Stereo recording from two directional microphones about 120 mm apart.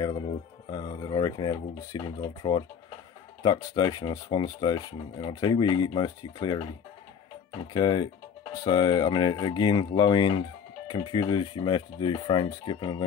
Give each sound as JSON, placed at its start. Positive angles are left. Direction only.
{"t": 0.7, "sound": "speech", "side_deg": 40}
{"t": 7.7, "sound": "speech", "side_deg": 40}